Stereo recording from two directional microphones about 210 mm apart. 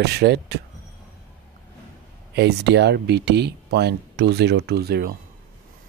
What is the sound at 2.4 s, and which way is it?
Speech, 55° right (ahead or behind).